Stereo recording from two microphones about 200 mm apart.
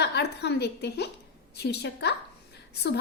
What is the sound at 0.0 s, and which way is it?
A woman's voice, 55° left (ahead or behind).